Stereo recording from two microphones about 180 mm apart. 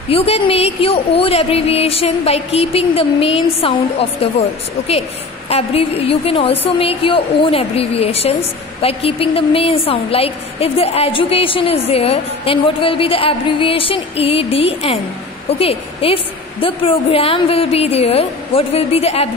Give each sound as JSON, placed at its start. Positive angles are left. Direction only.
{"t": 0.1, "sound": "a woman's voice", "side_deg": 30}
{"t": 5.5, "sound": "a woman's voice", "side_deg": 35}